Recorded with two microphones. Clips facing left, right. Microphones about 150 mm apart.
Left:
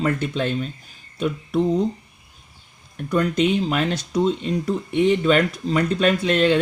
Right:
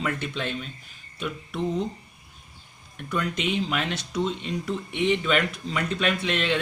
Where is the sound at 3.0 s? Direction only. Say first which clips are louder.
Left 9 dB; 40° left (ahead or behind).